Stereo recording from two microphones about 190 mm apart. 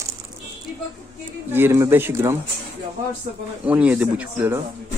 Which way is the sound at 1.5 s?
15° right (ahead or behind).